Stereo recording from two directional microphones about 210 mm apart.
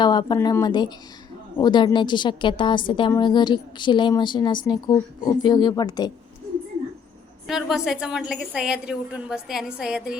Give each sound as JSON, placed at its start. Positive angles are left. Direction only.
{"t": 0.0, "sound": "a woman's voice", "side_deg": 20}
{"t": 7.4, "sound": "a woman's voice", "side_deg": 0}